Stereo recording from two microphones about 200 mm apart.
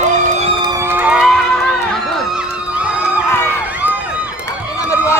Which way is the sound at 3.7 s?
10° right (ahead or behind).